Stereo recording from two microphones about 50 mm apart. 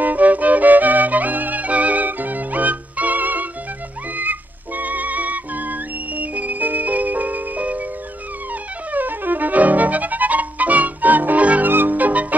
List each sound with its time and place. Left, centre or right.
0.0 s music: right
8.9 s music: right
11.7 s music: right